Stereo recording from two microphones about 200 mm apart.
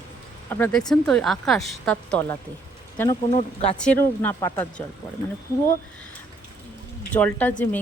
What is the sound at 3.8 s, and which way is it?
Speech, 5° left (ahead or behind).